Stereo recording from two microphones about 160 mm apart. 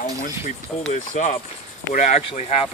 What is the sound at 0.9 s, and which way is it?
Speech, 50° left (ahead or behind).